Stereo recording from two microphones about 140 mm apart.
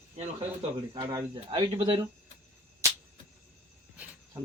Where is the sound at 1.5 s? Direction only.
40° right (ahead or behind).